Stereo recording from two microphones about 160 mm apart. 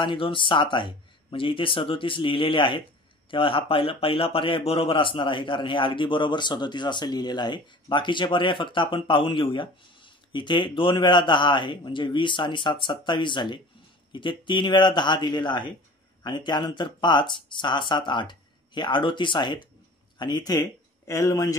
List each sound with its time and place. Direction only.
0.0 s a man's voice: 30° left (ahead or behind)